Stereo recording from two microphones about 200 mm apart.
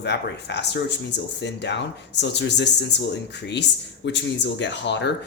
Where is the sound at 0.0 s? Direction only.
55° left (ahead or behind).